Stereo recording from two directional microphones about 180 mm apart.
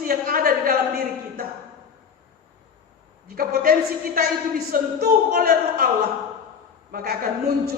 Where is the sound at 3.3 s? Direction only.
55° right (ahead or behind).